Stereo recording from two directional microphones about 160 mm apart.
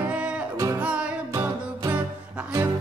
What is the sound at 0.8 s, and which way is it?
Music, 10° right (ahead or behind).